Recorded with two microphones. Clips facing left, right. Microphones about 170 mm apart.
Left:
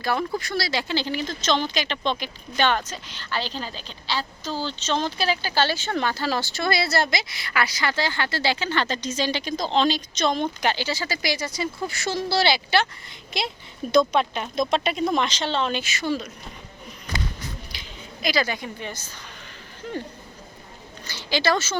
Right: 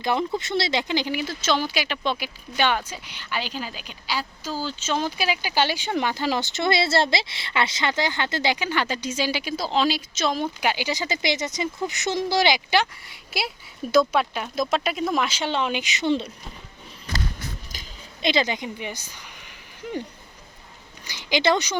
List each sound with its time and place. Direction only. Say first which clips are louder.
0.0 s speech: right 1 dB; 20° right (ahead or behind)
18.2 s speech: right 2 dB; 25° right (ahead or behind)
21.0 s speech: right 2 dB; 15° right (ahead or behind)